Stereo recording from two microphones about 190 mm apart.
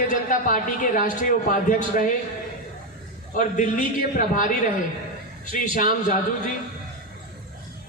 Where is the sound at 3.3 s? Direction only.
45° left (ahead or behind).